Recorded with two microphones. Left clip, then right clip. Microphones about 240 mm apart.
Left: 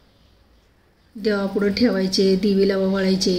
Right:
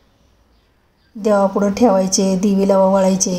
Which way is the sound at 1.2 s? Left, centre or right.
Right.